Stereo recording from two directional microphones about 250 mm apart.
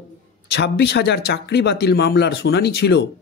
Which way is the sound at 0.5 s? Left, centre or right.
Left.